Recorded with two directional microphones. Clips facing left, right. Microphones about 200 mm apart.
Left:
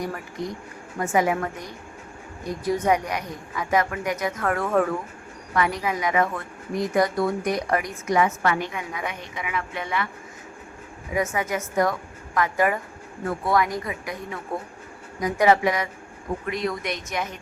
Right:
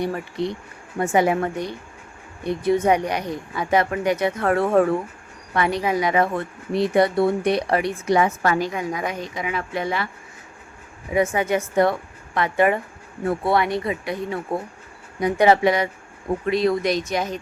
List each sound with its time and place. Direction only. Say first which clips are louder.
0.9 s a woman's voice: right 3 dB; 30° right (ahead or behind)
2.6 s a woman's voice: right 4 dB; 25° right (ahead or behind)
11.1 s a woman's voice: right 5 dB; 30° right (ahead or behind)